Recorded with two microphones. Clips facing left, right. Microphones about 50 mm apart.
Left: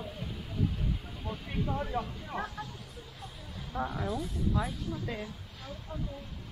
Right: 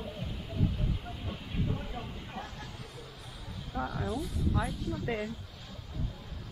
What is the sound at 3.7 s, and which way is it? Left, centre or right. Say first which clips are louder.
Speech: left 1 dB; left.